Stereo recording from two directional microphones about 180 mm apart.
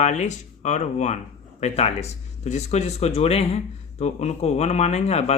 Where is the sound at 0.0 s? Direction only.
40° left (ahead or behind).